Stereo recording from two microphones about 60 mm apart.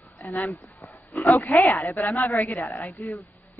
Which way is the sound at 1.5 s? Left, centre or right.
Left.